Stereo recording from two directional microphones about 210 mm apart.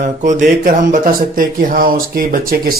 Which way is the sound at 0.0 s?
35° right (ahead or behind).